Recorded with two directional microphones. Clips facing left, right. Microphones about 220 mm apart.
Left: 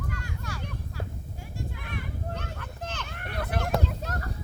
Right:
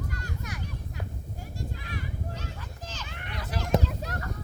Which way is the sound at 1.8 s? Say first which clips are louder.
Left 1 dB; 60° left (ahead or behind).